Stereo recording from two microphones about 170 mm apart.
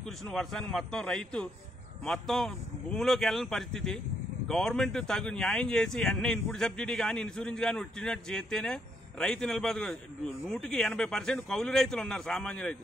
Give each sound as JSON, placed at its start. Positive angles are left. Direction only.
{"t": 0.3, "sound": "a man's voice", "side_deg": 0}